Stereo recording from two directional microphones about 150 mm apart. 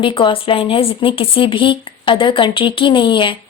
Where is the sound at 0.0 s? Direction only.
35° left (ahead or behind).